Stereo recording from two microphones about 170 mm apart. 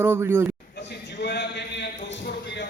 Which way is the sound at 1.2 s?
85° left.